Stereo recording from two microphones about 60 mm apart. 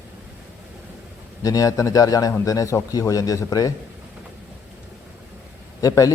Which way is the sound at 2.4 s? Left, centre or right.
Left.